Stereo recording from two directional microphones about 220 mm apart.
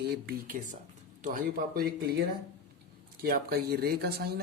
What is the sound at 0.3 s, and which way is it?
Speech, 40° right (ahead or behind).